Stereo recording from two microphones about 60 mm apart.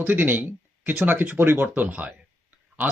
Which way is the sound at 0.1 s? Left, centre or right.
Right.